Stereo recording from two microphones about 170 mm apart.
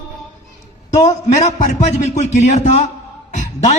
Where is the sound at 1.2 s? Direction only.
40° left (ahead or behind).